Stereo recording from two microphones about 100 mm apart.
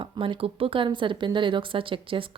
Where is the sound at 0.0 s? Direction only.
60° right (ahead or behind).